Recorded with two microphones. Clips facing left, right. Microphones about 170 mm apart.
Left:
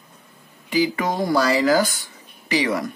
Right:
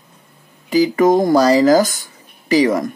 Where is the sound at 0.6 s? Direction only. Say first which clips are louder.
Right 8 dB; 40° right (ahead or behind).